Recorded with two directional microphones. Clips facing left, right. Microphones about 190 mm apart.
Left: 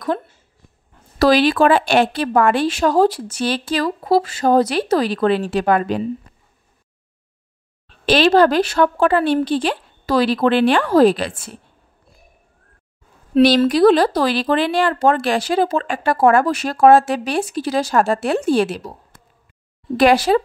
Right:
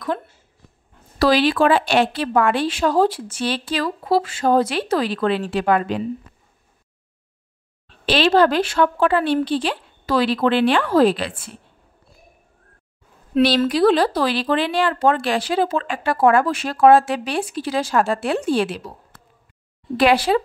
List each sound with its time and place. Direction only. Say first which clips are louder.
1.2 s speech: left 3 dB; 45° left (ahead or behind)
8.0 s speech: left 3 dB; 45° left (ahead or behind)
13.7 s speech: left 3 dB; 45° left (ahead or behind)
20.0 s speech: left 3 dB; 45° left (ahead or behind)